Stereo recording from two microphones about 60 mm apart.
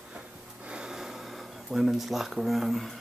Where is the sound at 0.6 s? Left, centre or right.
Centre.